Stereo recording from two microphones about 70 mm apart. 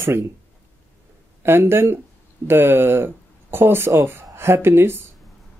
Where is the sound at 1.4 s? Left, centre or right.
Right.